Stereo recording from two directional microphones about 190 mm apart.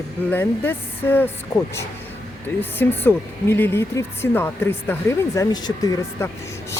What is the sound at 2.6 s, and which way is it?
Speech, 10° left (ahead or behind).